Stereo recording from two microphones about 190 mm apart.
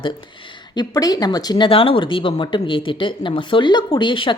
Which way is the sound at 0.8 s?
20° left (ahead or behind).